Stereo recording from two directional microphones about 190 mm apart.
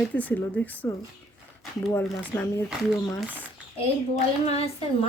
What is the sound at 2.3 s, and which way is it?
Speech, 10° left (ahead or behind).